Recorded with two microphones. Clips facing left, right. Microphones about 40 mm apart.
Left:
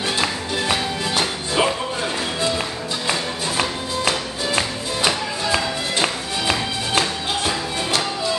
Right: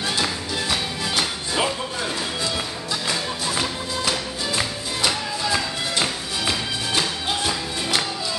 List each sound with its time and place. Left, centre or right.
0.7 s music: centre